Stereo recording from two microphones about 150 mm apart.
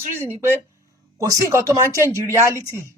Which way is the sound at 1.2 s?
20° right (ahead or behind).